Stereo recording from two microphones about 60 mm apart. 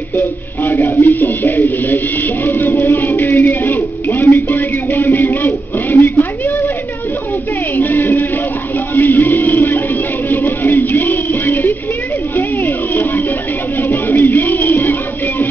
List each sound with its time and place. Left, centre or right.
0.1 s speech: left
2.4 s a sound: left
7.7 s speech: left
8.9 s music: left